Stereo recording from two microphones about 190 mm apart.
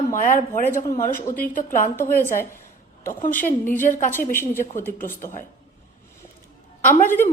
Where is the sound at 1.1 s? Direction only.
10° left (ahead or behind).